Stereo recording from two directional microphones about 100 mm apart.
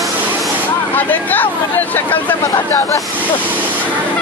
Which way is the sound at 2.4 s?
35° left (ahead or behind).